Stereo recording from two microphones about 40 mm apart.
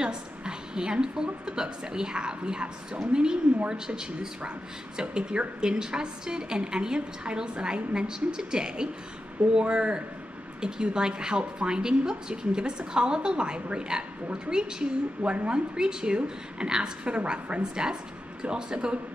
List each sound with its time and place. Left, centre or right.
0.0 s a woman's voice: right
15.7 s a woman's voice: centre